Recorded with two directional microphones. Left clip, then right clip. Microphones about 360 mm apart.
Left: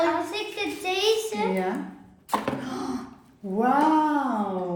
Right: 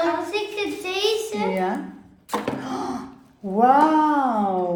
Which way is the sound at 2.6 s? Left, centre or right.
Centre.